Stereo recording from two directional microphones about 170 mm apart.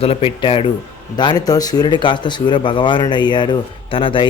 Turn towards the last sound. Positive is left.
turn(degrees=30)  # may be behind; listen again after turning